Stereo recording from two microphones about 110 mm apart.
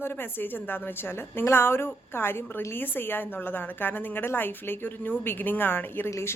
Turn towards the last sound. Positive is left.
turn(degrees=25)  # may be behind; listen again after turning